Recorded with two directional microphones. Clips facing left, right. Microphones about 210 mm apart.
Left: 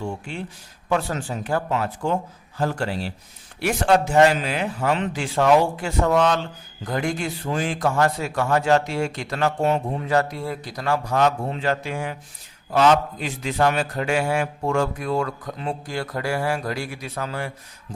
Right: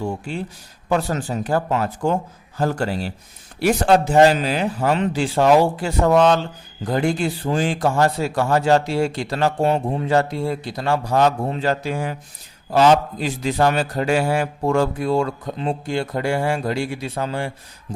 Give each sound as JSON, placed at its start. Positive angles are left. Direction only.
{"t": 0.0, "sound": "a man's voice", "side_deg": -35}